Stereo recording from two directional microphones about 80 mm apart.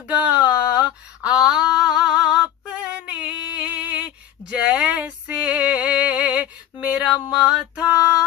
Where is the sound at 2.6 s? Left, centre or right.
Centre.